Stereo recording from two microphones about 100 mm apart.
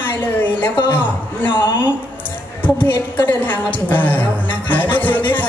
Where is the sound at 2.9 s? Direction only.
45° left (ahead or behind).